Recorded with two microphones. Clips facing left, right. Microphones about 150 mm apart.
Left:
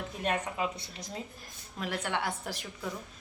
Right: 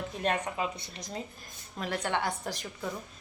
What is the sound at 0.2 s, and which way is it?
Speech, 5° left (ahead or behind).